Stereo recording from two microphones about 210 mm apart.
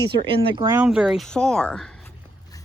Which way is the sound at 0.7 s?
5° right (ahead or behind).